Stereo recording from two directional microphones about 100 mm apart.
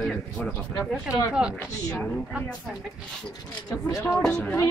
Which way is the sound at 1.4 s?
10° right (ahead or behind).